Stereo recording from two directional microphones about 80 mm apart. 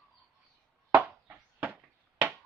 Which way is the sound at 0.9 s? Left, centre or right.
Right.